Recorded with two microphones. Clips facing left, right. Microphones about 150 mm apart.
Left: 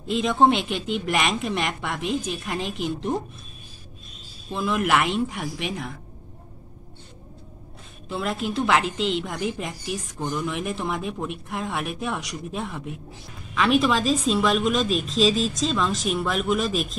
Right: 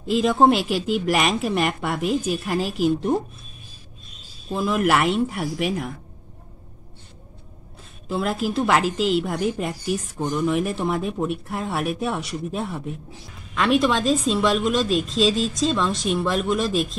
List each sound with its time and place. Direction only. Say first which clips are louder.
0.1 s a woman's voice: right 2 dB; 5° right (ahead or behind)
4.5 s a woman's voice: right 3 dB; 5° right (ahead or behind)
8.1 s a woman's voice: right 3 dB; centre (ahead or behind)